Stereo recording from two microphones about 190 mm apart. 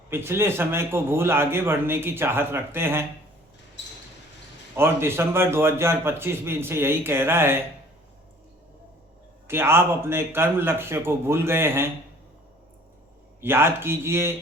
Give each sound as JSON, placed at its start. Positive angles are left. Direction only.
{"t": 0.1, "sound": "a man's voice", "side_deg": -10}
{"t": 3.8, "sound": "a sound", "side_deg": 70}
{"t": 4.7, "sound": "a man's voice", "side_deg": -10}
{"t": 9.5, "sound": "a man's voice", "side_deg": -10}
{"t": 13.4, "sound": "a man's voice", "side_deg": -10}